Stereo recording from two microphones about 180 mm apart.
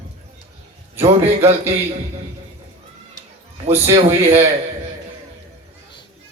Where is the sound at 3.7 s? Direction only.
15° right (ahead or behind).